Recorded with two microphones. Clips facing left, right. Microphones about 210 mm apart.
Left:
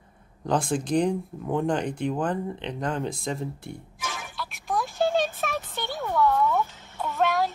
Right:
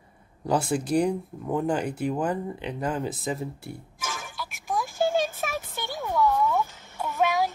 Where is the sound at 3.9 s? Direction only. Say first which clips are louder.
Even; 45° right (ahead or behind).